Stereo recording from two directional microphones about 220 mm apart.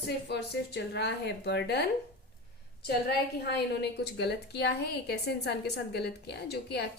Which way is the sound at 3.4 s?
50° left (ahead or behind).